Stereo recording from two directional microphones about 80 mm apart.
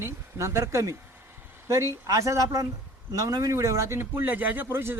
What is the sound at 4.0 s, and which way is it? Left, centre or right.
Speech, right.